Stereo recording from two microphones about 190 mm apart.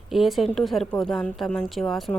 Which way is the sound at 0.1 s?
Centre (ahead or behind).